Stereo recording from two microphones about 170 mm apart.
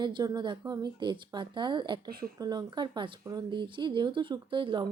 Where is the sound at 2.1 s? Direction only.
60° right (ahead or behind).